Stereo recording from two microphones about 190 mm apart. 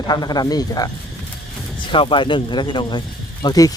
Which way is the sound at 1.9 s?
25° left (ahead or behind).